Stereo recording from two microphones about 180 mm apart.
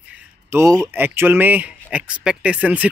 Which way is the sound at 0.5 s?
15° right (ahead or behind).